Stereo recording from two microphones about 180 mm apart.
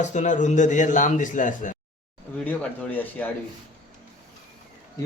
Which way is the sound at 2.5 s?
10° left (ahead or behind).